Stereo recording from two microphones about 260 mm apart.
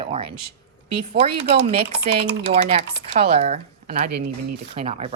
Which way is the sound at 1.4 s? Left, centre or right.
Right.